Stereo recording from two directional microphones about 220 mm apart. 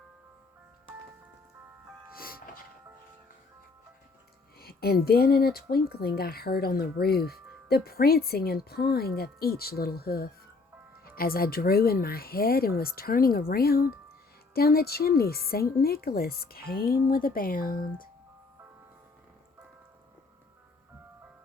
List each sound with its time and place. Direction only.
2.1 s music: 40° left (ahead or behind)
4.6 s a woman's voice: 45° left (ahead or behind)